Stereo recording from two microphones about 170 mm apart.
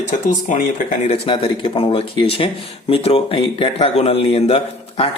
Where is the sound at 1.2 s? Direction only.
30° left (ahead or behind).